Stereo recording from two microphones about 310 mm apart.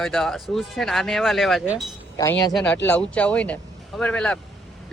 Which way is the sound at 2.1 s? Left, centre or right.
Centre.